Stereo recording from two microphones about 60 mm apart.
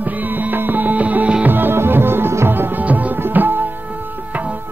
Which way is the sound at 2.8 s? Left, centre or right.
Right.